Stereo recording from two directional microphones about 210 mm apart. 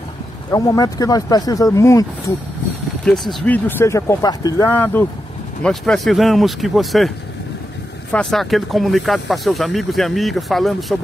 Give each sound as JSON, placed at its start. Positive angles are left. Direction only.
{"t": 0.5, "sound": "speech", "side_deg": 15}
{"t": 3.1, "sound": "speech", "side_deg": 5}
{"t": 8.1, "sound": "speech", "side_deg": 5}